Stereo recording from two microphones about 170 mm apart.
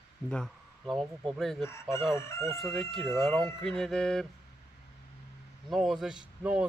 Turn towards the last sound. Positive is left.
turn(degrees=-5)  # may be behind; listen again after turning